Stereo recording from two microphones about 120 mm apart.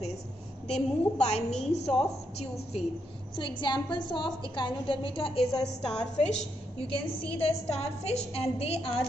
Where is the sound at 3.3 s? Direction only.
40° left (ahead or behind).